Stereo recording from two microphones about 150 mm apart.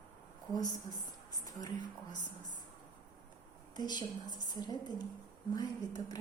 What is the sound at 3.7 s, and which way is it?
A woman's voice, 30° left (ahead or behind).